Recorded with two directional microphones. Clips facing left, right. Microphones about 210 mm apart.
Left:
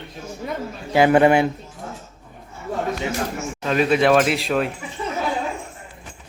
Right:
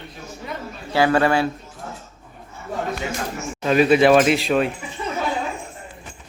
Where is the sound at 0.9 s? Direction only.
20° left (ahead or behind).